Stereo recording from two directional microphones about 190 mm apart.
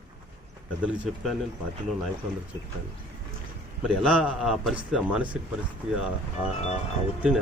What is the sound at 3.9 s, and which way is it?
A man's voice, 5° right (ahead or behind).